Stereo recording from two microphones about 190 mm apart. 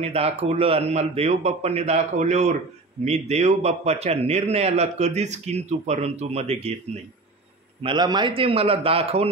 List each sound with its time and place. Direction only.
0.0 s a man's voice: 35° right (ahead or behind)
7.8 s a man's voice: 25° right (ahead or behind)